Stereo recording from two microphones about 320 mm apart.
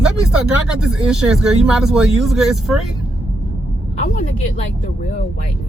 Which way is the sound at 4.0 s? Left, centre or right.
Left.